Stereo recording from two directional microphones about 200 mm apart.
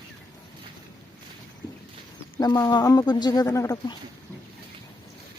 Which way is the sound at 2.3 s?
20° left (ahead or behind).